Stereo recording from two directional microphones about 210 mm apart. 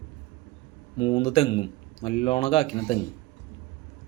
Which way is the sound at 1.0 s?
25° left (ahead or behind).